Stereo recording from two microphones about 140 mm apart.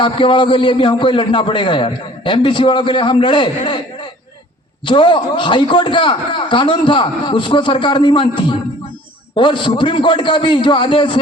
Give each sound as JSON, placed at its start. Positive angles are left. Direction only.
{"t": 0.0, "sound": "a man's voice", "side_deg": 35}
{"t": 4.9, "sound": "a man's voice", "side_deg": 35}